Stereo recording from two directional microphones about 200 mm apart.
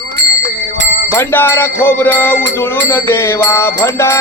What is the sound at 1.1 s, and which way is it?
Music, 10° left (ahead or behind).